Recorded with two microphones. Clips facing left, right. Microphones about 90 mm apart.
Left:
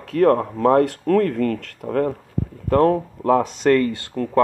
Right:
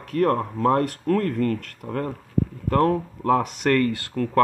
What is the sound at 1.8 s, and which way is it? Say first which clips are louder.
Speech: left 9 dB; 25° left (ahead or behind).